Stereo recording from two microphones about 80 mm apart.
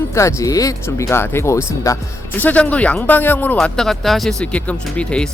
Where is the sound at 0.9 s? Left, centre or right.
Left.